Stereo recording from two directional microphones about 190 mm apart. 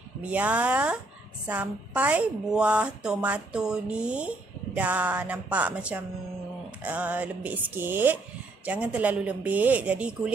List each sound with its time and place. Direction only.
0.2 s a woman's voice: 5° right (ahead or behind)